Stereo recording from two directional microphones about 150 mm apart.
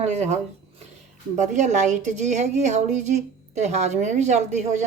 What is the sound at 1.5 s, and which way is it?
A woman's voice, 55° right (ahead or behind).